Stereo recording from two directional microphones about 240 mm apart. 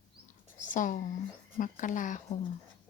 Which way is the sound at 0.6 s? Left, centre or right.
Left.